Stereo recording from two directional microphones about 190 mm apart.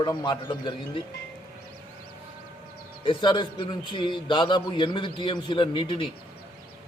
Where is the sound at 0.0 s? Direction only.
20° left (ahead or behind).